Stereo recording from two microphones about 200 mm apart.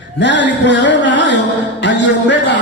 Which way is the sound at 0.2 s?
60° left (ahead or behind).